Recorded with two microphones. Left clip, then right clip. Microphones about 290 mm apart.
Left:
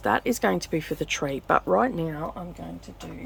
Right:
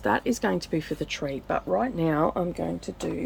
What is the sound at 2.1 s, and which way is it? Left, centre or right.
Speech, centre.